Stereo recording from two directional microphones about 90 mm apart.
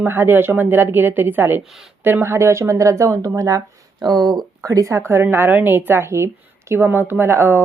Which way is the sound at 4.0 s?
50° right (ahead or behind).